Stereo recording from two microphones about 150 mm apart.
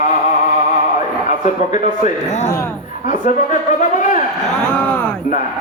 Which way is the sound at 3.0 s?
60° left (ahead or behind).